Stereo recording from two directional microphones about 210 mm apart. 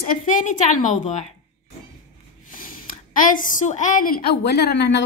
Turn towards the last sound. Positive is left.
turn(degrees=55)  # may be behind; listen again after turning